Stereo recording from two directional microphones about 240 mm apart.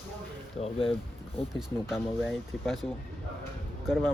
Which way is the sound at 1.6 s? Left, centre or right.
Centre.